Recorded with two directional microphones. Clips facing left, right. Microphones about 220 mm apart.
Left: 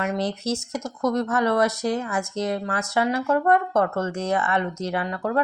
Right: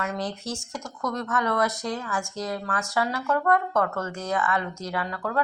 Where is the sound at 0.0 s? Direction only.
25° left (ahead or behind).